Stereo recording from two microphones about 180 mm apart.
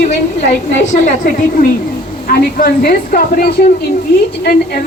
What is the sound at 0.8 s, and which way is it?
A woman's voice, 40° left (ahead or behind).